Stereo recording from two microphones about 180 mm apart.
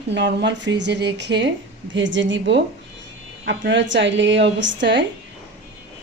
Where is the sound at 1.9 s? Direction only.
90° right.